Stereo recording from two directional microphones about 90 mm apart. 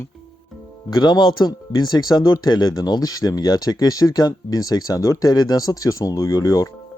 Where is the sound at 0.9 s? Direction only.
55° left (ahead or behind).